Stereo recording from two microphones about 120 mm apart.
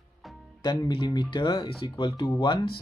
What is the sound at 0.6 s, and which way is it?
Speech, 35° left (ahead or behind).